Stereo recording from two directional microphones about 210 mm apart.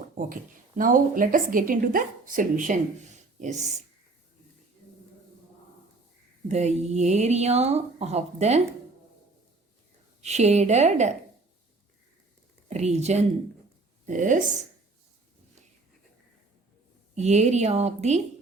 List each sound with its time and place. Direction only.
0.8 s a woman's voice: 40° right (ahead or behind)
6.5 s a woman's voice: 30° right (ahead or behind)
10.2 s a woman's voice: 30° right (ahead or behind)
12.6 s a woman's voice: 30° right (ahead or behind)
17.2 s a woman's voice: 35° right (ahead or behind)